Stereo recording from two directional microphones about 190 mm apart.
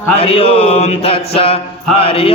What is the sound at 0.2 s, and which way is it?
Mantra, 30° left (ahead or behind).